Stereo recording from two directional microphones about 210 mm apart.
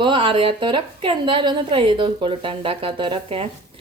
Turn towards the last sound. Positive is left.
turn(degrees=-25)  # may be behind; listen again after turning